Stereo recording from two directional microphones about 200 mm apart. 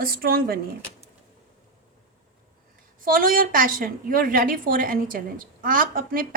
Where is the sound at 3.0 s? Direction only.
45° right (ahead or behind).